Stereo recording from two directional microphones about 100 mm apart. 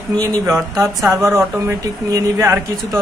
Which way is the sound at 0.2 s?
40° right (ahead or behind).